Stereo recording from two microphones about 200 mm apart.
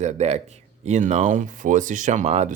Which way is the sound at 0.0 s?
35° right (ahead or behind).